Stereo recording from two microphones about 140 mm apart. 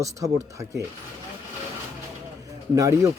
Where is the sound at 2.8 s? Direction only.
20° right (ahead or behind).